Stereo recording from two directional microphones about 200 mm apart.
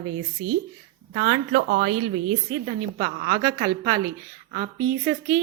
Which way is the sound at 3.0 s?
45° right (ahead or behind).